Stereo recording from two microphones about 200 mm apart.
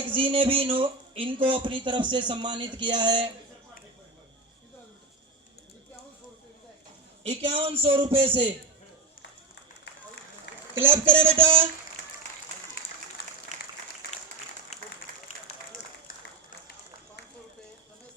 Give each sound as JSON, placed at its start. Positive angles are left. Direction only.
{"t": 0.1, "sound": "speech", "side_deg": -25}
{"t": 7.3, "sound": "speech", "side_deg": -30}
{"t": 10.8, "sound": "a man's voice", "side_deg": -10}
{"t": 11.4, "sound": "speech", "side_deg": -25}
{"t": 15.1, "sound": "applause", "side_deg": -45}